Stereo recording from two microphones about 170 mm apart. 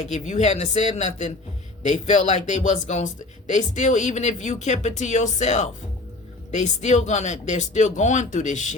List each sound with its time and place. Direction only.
0.1 s speech: 40° left (ahead or behind)